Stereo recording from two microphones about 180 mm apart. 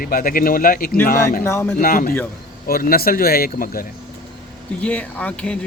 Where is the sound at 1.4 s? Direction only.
10° left (ahead or behind).